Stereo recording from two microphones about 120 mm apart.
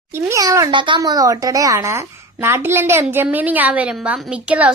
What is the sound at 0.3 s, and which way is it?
A woman's voice, 25° right (ahead or behind).